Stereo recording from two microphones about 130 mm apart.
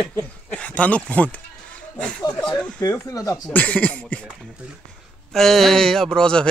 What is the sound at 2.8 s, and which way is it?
Speech, 25° left (ahead or behind).